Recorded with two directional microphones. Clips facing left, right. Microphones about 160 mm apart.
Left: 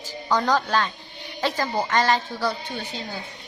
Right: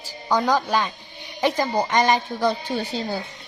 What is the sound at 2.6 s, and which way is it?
Speech, 35° right (ahead or behind).